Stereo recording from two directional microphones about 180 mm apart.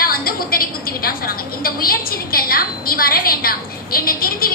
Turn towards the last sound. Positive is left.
turn(degrees=55)  # may be behind; listen again after turning